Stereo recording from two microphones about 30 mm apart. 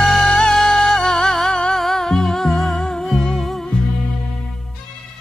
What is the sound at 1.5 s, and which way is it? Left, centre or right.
Music, left.